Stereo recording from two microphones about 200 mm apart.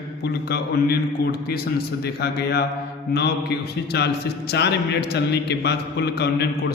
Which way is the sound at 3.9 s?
55° left (ahead or behind).